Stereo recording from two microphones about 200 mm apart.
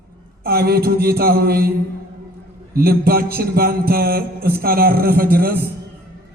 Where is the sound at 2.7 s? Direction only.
50° right (ahead or behind).